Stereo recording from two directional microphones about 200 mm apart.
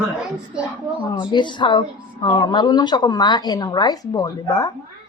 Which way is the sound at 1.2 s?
20° left (ahead or behind).